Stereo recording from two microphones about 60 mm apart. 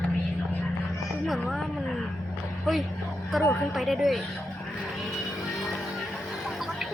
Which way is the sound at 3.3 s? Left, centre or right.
Centre.